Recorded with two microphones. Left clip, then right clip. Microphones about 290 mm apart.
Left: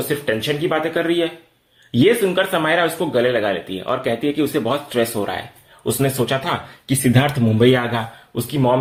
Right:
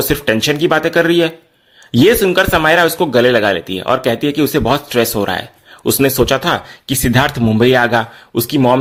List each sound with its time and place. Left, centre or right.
0.1 s speech: right